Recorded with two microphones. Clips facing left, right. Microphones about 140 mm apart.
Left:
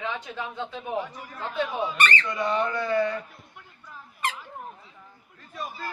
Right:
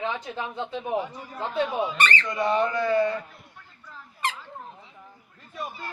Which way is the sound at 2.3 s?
20° right (ahead or behind).